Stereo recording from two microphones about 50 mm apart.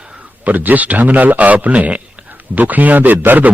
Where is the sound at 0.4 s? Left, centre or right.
Right.